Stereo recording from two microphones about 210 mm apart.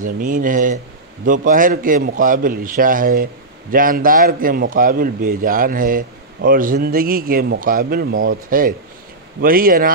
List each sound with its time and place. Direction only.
0.0 s a man's voice: 40° right (ahead or behind)